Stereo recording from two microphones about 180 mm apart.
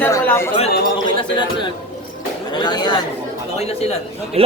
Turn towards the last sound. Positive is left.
turn(degrees=-35)  # may be behind; listen again after turning